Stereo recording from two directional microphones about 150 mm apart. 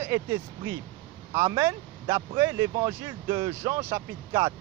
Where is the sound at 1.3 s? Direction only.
20° right (ahead or behind).